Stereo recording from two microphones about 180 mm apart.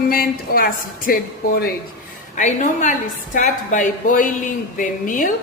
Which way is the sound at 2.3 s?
45° left (ahead or behind).